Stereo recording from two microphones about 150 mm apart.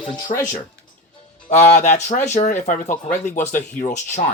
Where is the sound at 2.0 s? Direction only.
50° left (ahead or behind).